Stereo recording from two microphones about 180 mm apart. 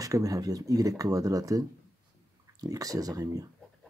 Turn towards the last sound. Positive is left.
turn(degrees=-20)  # may be behind; listen again after turning